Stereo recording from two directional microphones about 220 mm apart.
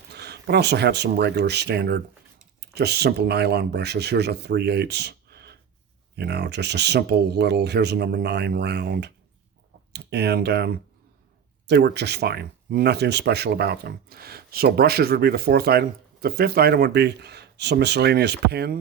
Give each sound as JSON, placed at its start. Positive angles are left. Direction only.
{"t": 0.1, "sound": "speech", "side_deg": -50}